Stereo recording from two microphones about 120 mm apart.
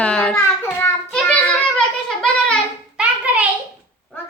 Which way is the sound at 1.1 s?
10° left (ahead or behind).